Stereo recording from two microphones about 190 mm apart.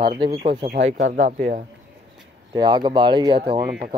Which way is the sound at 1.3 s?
40° right (ahead or behind).